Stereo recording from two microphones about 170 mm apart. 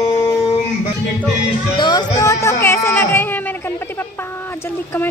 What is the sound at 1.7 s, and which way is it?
Speech, 25° left (ahead or behind).